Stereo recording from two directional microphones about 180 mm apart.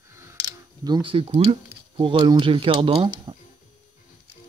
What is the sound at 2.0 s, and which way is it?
Speech, 25° right (ahead or behind).